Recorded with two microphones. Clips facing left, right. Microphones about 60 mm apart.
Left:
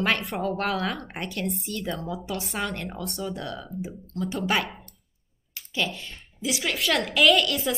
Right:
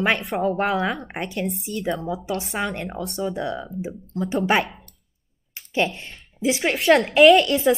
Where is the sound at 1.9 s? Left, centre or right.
Centre.